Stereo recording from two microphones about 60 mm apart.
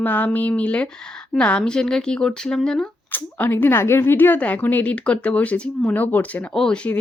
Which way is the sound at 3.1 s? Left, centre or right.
Left.